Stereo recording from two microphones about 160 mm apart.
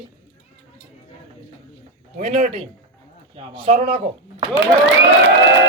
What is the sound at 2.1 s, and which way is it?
Speech, 55° right (ahead or behind).